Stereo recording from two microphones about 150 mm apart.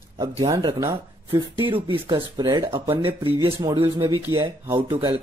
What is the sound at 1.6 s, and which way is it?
Speech, 35° right (ahead or behind).